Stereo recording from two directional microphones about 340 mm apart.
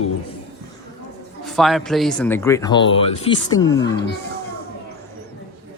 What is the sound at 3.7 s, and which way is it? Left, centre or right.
Speech, left.